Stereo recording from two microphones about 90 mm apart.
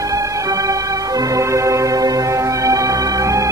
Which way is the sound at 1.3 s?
35° right (ahead or behind).